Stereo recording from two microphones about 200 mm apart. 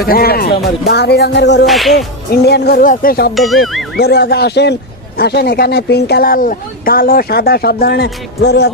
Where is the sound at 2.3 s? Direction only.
50° left (ahead or behind).